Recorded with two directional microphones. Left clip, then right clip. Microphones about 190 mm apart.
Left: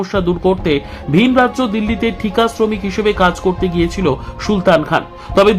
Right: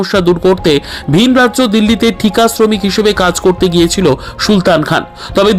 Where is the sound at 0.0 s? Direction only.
25° right (ahead or behind).